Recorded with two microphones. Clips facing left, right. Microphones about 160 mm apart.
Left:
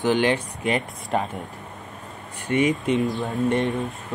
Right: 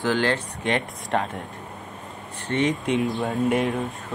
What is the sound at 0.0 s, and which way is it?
Speech, 20° left (ahead or behind).